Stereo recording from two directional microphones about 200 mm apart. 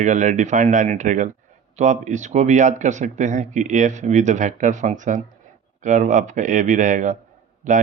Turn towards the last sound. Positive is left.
turn(degrees=-35)  # may be behind; listen again after turning